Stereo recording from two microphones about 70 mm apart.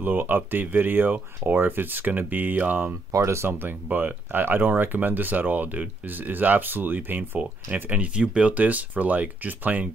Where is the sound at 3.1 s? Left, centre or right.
Right.